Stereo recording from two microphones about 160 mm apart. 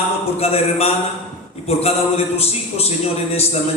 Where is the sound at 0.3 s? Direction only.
40° left (ahead or behind).